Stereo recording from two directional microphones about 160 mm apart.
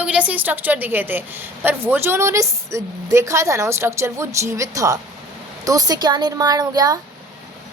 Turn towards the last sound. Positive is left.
turn(degrees=-25)  # may be behind; listen again after turning